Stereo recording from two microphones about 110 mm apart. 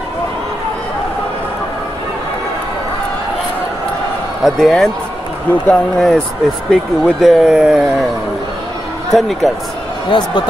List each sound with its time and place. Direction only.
4.4 s speech: centre (ahead or behind)
9.1 s speech: centre (ahead or behind)
10.0 s speech: 45° left (ahead or behind)